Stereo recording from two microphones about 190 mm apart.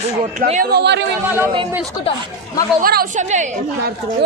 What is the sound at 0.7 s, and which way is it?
Speech, 60° right (ahead or behind).